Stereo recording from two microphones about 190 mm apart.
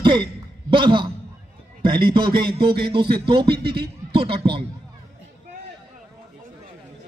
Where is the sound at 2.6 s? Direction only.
55° right (ahead or behind).